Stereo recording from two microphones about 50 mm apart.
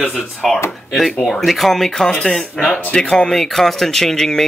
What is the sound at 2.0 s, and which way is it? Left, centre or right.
Speech, centre.